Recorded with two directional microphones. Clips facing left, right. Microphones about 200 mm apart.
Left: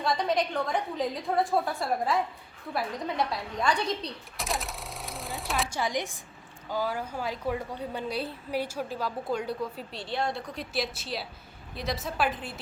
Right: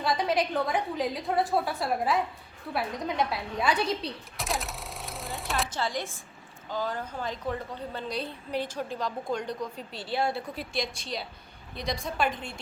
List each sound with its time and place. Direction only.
0.0 s a woman's voice: 5° right (ahead or behind)
5.6 s a woman's voice: 15° left (ahead or behind)